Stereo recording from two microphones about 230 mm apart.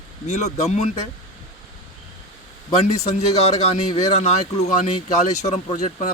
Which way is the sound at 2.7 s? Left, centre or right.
Left.